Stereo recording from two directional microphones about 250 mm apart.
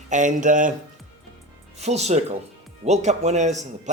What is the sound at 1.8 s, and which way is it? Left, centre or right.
Speech, right.